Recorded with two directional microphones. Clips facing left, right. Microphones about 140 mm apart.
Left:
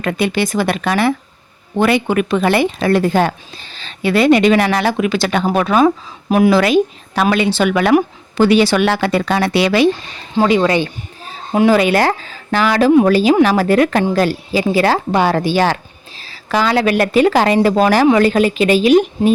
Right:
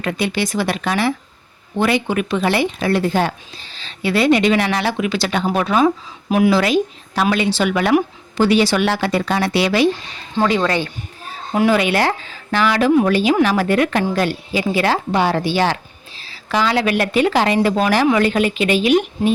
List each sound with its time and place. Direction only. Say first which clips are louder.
0.0 s speech: left 4 dB; 55° left (ahead or behind); by 7.9 s 70° left (ahead or behind)
7.9 s a woman's voice: left 3 dB; 60° left (ahead or behind)
10.5 s speech: left 7 dB; 15° left (ahead or behind)
11.7 s a woman's voice: left 4 dB; 40° left (ahead or behind)